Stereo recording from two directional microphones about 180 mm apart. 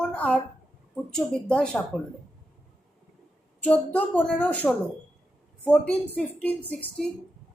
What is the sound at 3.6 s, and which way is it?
Speech, 5° left (ahead or behind).